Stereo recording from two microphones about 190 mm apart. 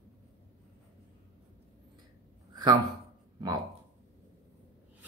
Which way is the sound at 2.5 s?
20° right (ahead or behind).